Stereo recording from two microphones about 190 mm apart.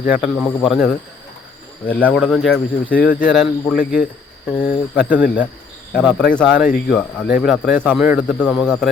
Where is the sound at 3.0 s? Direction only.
50° left (ahead or behind).